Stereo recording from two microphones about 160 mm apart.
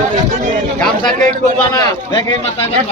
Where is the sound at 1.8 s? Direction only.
25° left (ahead or behind).